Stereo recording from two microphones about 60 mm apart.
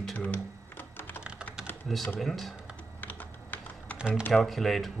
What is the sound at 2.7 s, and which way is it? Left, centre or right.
Typing, left.